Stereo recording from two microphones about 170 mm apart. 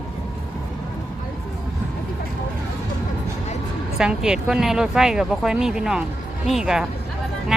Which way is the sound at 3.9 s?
5° right (ahead or behind).